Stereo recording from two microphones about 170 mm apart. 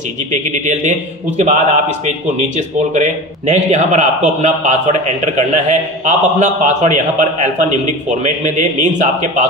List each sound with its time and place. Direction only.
0.3 s a man's voice: 45° right (ahead or behind)